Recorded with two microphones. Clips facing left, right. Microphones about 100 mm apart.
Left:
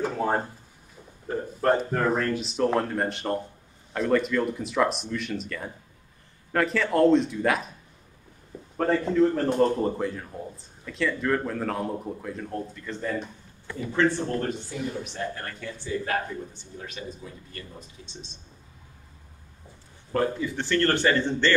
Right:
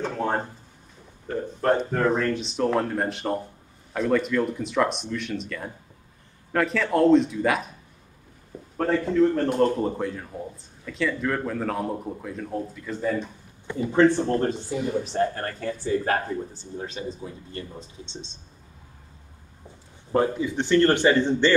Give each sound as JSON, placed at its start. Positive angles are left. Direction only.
{"t": 0.0, "sound": "speech", "side_deg": 5}
{"t": 9.1, "sound": "speech", "side_deg": 0}
{"t": 13.7, "sound": "speech", "side_deg": -20}
{"t": 14.1, "sound": "speech", "side_deg": -30}
{"t": 20.1, "sound": "speech", "side_deg": -20}